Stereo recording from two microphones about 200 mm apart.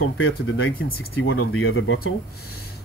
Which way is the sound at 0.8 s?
90° left.